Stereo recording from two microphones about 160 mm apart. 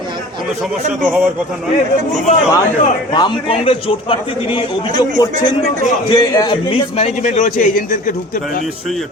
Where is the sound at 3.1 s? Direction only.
30° left (ahead or behind).